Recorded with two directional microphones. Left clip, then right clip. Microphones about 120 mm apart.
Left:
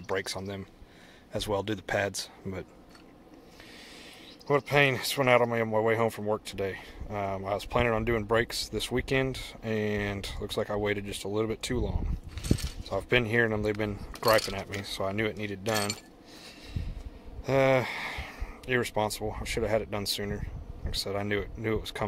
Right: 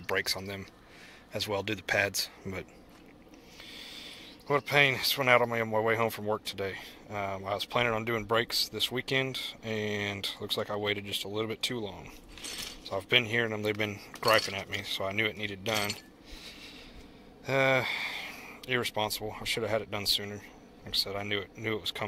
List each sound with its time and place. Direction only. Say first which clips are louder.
0.0 s speech: right 1 dB; 30° left (ahead or behind)
1.3 s speech: left 2 dB; 45° left (ahead or behind)
2.0 s speech: right 1 dB; 30° left (ahead or behind)
3.7 s a sound: right 4 dB; 55° left (ahead or behind)
4.5 s speech: left 1 dB; 50° left (ahead or behind)
12.8 s speech: even; 50° left (ahead or behind)
17.5 s speech: left 2 dB; 55° left (ahead or behind)